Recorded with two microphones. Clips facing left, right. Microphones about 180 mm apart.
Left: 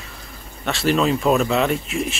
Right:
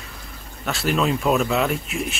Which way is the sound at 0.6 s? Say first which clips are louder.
Left 3 dB; centre (ahead or behind).